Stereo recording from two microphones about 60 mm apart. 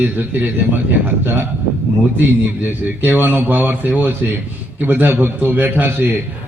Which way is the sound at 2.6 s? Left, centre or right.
Right.